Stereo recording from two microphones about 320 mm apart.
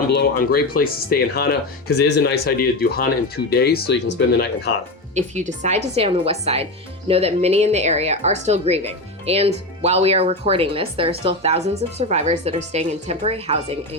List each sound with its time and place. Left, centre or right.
0.1 s speech: left
5.1 s speech: right